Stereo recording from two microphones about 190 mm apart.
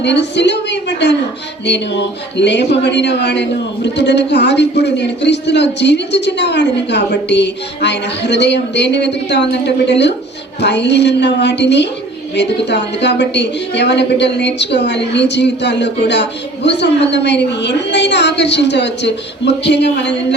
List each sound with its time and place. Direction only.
0.0 s speech: 65° left (ahead or behind)